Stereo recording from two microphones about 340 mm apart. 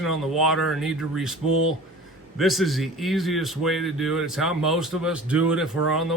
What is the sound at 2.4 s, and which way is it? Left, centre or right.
Speech, centre.